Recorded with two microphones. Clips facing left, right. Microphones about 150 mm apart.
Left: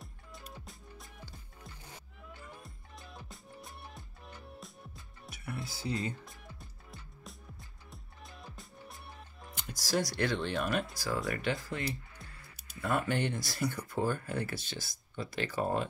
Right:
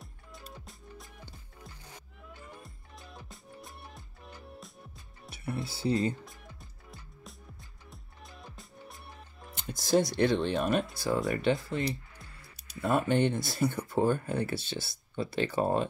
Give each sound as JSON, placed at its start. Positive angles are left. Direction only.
{"t": 0.5, "sound": "music", "side_deg": 0}
{"t": 2.2, "sound": "music", "side_deg": 0}
{"t": 5.3, "sound": "speech", "side_deg": -30}
{"t": 6.2, "sound": "music", "side_deg": 0}
{"t": 9.6, "sound": "speech", "side_deg": -25}
{"t": 12.8, "sound": "speech", "side_deg": -25}